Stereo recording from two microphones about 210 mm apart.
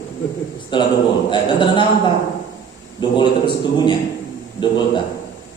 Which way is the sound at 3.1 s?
20° left (ahead or behind).